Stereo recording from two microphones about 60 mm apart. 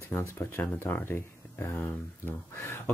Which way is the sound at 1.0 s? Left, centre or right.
Left.